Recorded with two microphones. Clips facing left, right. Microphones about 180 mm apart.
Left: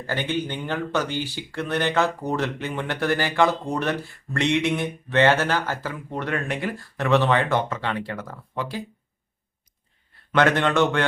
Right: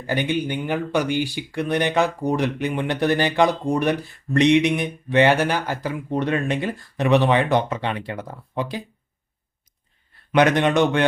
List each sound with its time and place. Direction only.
0.1 s speech: 15° right (ahead or behind)
10.3 s speech: 15° right (ahead or behind)